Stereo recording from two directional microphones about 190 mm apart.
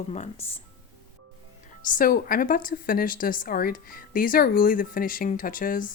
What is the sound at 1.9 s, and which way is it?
Speech, 50° left (ahead or behind).